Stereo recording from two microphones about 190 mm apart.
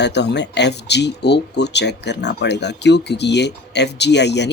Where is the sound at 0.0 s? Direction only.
65° left (ahead or behind).